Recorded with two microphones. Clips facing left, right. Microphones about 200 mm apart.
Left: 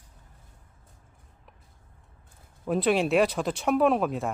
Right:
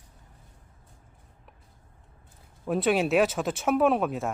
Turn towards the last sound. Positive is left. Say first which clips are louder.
# even
turn(degrees=0)  # may be behind; listen again after turning